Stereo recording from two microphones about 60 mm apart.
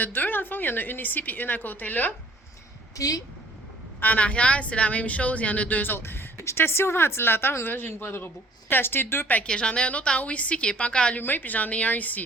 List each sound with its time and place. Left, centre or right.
0.0 s a woman's voice: left
3.0 s speech: left
4.0 s speech: left
6.3 s a woman's voice: left
9.4 s speech: centre
11.2 s speech: left